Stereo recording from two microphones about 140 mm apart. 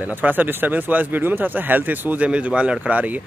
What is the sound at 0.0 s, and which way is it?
Speech, 10° right (ahead or behind).